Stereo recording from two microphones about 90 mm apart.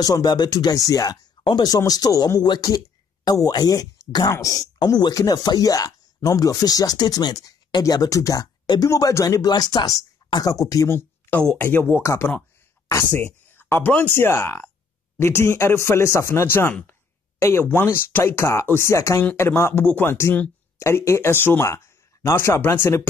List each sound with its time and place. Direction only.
0.0 s speech: 45° left (ahead or behind)
10.9 s speech: 20° left (ahead or behind)
12.0 s speech: 35° left (ahead or behind)
13.1 s speech: 25° left (ahead or behind)